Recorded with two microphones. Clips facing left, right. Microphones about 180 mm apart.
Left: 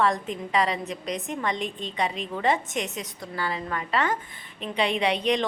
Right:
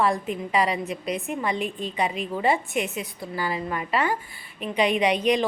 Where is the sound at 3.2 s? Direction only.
10° right (ahead or behind).